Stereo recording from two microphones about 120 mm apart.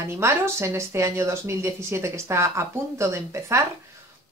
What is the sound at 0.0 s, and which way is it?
Speech, 20° right (ahead or behind).